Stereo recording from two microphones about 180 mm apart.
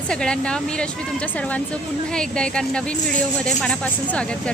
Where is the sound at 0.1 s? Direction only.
5° left (ahead or behind).